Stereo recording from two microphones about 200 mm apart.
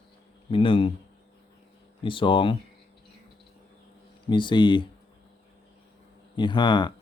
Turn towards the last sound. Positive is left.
turn(degrees=20)  # may be behind; listen again after turning